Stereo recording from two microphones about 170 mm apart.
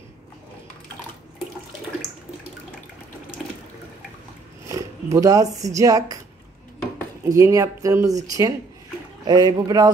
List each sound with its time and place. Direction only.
4.6 s speech: 20° right (ahead or behind)
7.2 s speech: 20° right (ahead or behind)